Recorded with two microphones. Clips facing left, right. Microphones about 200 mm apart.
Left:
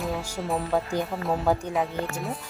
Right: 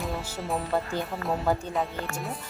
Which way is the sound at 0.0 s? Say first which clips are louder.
Left 3 dB; centre (ahead or behind).